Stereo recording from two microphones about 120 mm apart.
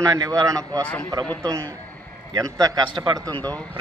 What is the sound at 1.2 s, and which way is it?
Speech, 10° left (ahead or behind).